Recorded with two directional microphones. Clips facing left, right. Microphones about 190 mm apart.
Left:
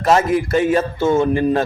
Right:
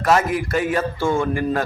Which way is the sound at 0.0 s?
25° left (ahead or behind).